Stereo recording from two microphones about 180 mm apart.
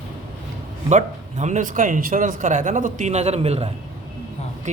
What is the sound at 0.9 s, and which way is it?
A man's voice, 40° right (ahead or behind).